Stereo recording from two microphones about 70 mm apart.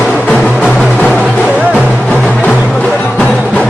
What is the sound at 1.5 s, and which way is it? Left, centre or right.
Music, centre.